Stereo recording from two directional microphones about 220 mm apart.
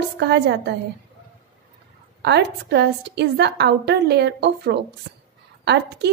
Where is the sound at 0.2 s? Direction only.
50° right (ahead or behind).